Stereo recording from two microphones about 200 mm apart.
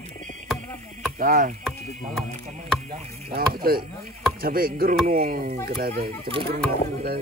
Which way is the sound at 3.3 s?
45° right (ahead or behind).